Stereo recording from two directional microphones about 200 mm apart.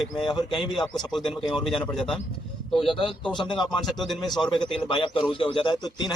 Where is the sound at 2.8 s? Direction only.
25° left (ahead or behind).